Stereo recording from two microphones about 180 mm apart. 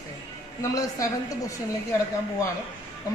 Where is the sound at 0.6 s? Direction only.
20° left (ahead or behind).